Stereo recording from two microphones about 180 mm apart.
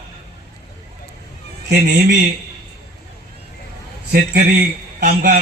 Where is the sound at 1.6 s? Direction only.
65° right (ahead or behind).